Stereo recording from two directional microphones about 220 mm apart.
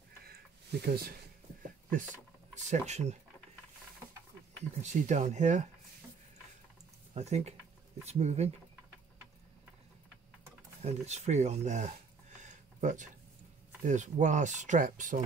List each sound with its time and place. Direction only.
0.2 s a sound: 45° right (ahead or behind)
2.5 s speech: 30° right (ahead or behind)
4.8 s speech: 35° right (ahead or behind)
7.2 s speech: 30° right (ahead or behind)
10.8 s speech: 30° right (ahead or behind)